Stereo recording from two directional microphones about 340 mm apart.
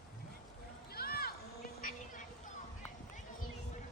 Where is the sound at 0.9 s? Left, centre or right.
Left.